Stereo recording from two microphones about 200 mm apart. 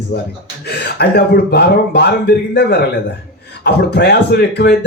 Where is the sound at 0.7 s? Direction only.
55° left (ahead or behind).